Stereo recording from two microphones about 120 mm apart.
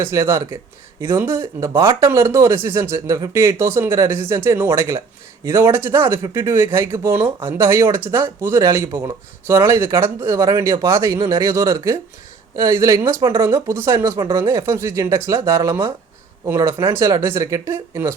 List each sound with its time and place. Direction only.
0.0 s speech: 25° right (ahead or behind)